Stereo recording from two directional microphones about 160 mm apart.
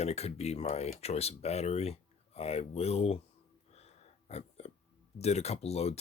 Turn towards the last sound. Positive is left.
turn(degrees=40)  # may be behind; listen again after turning